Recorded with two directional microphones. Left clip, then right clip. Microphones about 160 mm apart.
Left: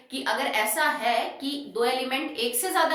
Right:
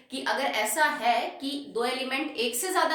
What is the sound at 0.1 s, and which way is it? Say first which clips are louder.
A woman's voice: left 2 dB; 25° right (ahead or behind).